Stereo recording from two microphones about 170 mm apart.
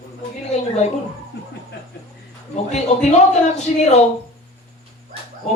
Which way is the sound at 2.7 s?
45° left (ahead or behind).